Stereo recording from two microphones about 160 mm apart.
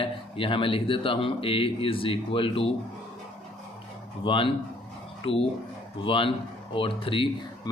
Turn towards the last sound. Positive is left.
turn(degrees=35)  # may be behind; listen again after turning